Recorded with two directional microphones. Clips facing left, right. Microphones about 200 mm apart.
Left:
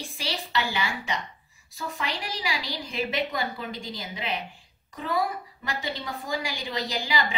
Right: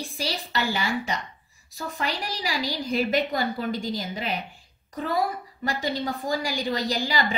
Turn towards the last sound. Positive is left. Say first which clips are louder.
# right 3 dB
turn(degrees=-40)  # may be behind; listen again after turning